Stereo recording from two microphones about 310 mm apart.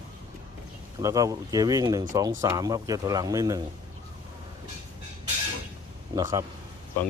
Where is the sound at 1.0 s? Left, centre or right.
Centre.